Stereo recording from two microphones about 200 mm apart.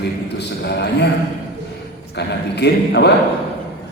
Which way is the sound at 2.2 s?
55° left (ahead or behind).